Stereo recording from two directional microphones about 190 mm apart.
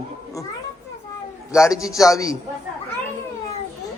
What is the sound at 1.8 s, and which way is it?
Speech, 15° left (ahead or behind).